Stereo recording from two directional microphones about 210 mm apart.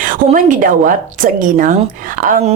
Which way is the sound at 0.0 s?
40° right (ahead or behind).